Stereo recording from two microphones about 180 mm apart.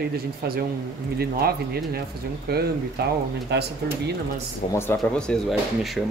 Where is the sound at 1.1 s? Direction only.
60° right (ahead or behind).